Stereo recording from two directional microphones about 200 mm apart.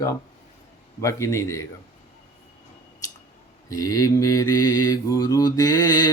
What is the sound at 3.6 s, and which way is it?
Mantra, 15° left (ahead or behind).